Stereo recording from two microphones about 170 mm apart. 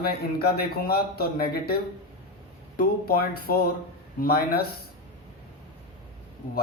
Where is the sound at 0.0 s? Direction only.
65° left (ahead or behind).